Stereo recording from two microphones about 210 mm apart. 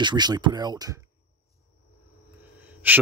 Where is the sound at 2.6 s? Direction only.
10° right (ahead or behind).